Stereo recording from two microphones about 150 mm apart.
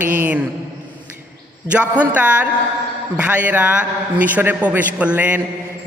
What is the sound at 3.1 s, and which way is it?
A man's voice, 10° right (ahead or behind).